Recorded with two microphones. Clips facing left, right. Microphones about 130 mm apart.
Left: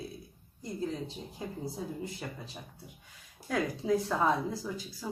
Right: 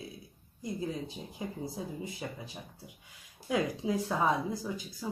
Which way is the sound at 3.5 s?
10° right (ahead or behind).